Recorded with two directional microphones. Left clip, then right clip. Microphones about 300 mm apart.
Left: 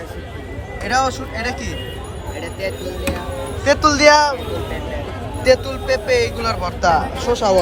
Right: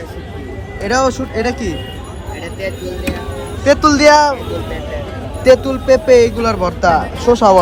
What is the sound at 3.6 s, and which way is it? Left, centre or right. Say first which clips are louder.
Speech: right 3 dB; centre.